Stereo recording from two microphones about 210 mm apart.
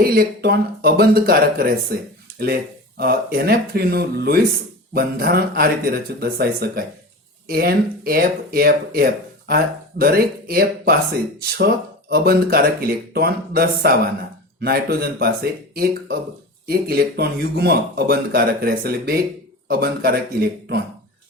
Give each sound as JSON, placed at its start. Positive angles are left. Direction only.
{"t": 0.0, "sound": "speech", "side_deg": -45}